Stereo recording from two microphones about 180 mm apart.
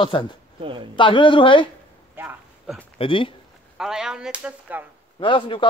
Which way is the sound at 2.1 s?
10° right (ahead or behind).